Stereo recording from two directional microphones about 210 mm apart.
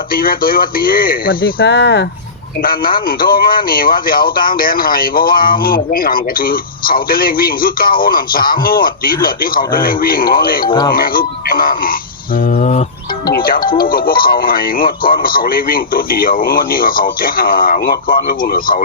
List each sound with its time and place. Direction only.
0.1 s speech: 45° left (ahead or behind)
2.6 s speech: 45° left (ahead or behind)
10.7 s speech: 20° left (ahead or behind)
10.9 s speech: 45° left (ahead or behind)